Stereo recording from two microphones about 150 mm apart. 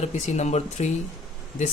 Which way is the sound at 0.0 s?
50° left (ahead or behind).